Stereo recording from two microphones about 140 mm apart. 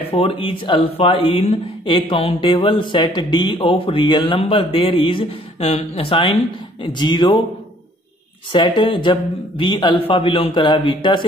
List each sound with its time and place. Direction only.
0.1 s speech: 40° left (ahead or behind)
8.5 s speech: 35° left (ahead or behind)